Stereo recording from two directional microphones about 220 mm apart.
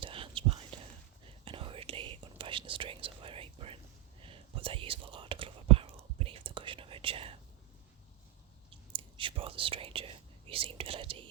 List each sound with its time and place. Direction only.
0.0 s whispering: 25° right (ahead or behind)
8.7 s whispering: 25° right (ahead or behind)